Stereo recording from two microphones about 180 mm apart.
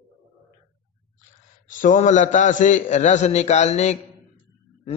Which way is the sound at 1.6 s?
45° left (ahead or behind).